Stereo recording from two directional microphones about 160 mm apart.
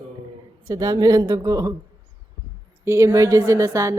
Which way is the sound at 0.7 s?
20° right (ahead or behind).